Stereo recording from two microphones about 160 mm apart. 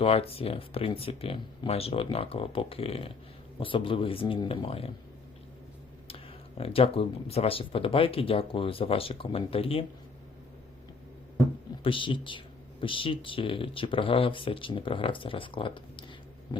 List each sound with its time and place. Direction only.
0.0 s speech: 35° left (ahead or behind)
6.6 s speech: 35° left (ahead or behind)
11.8 s speech: 35° left (ahead or behind)
16.5 s a sound: 25° left (ahead or behind)